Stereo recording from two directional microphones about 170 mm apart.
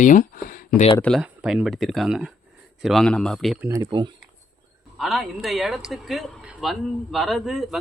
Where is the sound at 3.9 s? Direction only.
25° right (ahead or behind).